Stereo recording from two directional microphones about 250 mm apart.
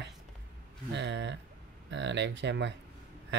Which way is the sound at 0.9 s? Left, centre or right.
Right.